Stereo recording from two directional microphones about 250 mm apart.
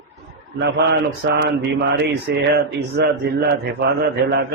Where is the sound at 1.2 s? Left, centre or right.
Right.